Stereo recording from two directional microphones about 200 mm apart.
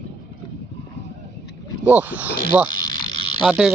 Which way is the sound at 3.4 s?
5° right (ahead or behind).